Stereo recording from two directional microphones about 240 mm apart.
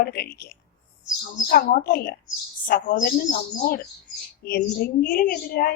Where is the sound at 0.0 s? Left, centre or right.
Left.